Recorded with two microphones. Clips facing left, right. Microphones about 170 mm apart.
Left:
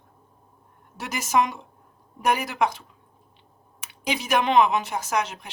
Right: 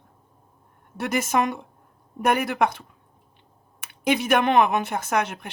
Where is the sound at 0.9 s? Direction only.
55° right (ahead or behind).